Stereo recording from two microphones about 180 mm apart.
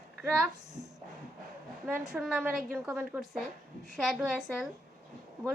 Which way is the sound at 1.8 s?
Centre (ahead or behind).